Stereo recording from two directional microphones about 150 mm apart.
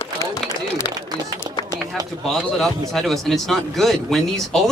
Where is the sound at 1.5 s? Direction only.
25° right (ahead or behind).